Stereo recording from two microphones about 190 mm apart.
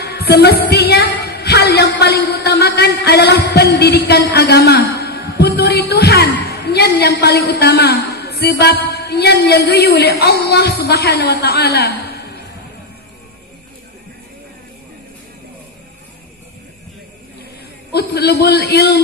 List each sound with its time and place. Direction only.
0.0 s a woman's voice: 60° left (ahead or behind)
17.9 s a man's voice: 55° left (ahead or behind)